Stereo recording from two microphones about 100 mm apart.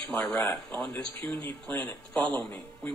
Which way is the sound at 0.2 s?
15° left (ahead or behind).